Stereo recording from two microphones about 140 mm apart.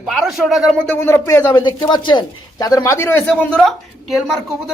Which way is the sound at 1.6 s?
35° left (ahead or behind).